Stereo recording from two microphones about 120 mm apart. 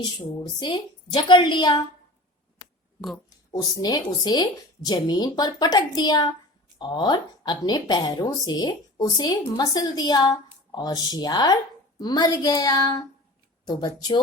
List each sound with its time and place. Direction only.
0.0 s a woman's voice: 40° left (ahead or behind)
3.2 s a woman's voice: 30° left (ahead or behind)